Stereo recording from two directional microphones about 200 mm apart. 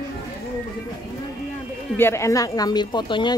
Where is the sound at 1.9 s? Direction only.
10° left (ahead or behind).